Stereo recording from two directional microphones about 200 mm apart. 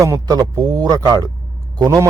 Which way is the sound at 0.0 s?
15° right (ahead or behind).